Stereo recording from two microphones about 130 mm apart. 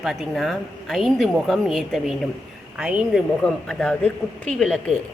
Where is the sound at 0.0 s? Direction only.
Centre (ahead or behind).